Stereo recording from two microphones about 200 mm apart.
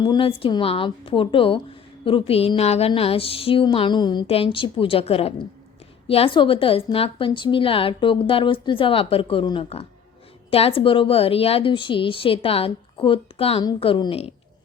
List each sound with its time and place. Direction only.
0.0 s a woman's voice: 25° left (ahead or behind)